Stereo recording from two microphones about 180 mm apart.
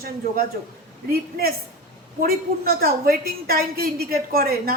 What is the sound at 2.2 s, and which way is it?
A woman's voice, 55° right (ahead or behind).